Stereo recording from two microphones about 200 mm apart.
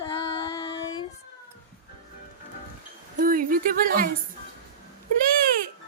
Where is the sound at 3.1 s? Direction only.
45° right (ahead or behind).